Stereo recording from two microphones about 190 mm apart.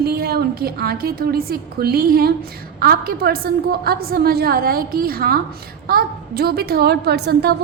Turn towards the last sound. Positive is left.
turn(degrees=-60)  # may be behind; listen again after turning